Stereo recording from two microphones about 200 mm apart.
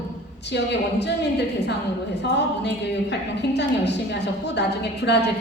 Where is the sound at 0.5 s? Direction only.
60° left (ahead or behind).